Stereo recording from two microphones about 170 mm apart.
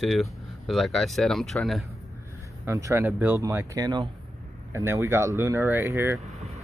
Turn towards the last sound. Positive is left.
turn(degrees=-15)  # may be behind; listen again after turning